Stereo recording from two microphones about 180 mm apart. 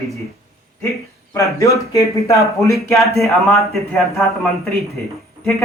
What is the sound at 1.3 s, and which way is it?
Speech, 15° left (ahead or behind).